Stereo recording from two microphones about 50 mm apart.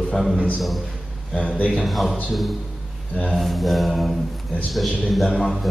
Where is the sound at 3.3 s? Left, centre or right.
Centre.